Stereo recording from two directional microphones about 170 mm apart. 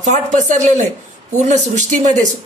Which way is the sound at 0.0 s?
45° right (ahead or behind).